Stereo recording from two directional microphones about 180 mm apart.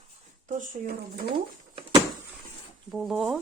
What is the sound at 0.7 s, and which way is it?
Speech, 55° right (ahead or behind).